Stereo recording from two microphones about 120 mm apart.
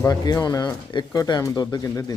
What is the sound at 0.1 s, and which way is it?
Speech, 35° left (ahead or behind).